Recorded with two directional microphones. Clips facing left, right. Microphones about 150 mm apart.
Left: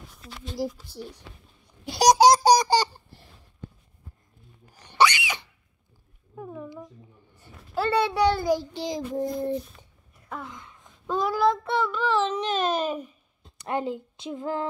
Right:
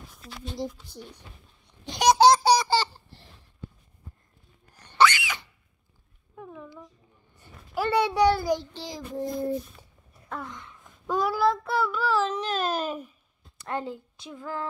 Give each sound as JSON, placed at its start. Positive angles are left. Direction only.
{"t": 0.1, "sound": "speech", "side_deg": 5}
{"t": 2.3, "sound": "baby laughter", "side_deg": 45}
{"t": 2.7, "sound": "laughter", "side_deg": 15}
{"t": 4.8, "sound": "a sound", "side_deg": 15}
{"t": 7.7, "sound": "a sound", "side_deg": -10}
{"t": 8.2, "sound": "a child's voice", "side_deg": -10}
{"t": 8.5, "sound": "child singing", "side_deg": 10}
{"t": 9.8, "sound": "a sound", "side_deg": -5}
{"t": 10.3, "sound": "child singing", "side_deg": 0}
{"t": 11.1, "sound": "child singing", "side_deg": -10}
{"t": 13.4, "sound": "a woman's voice", "side_deg": 15}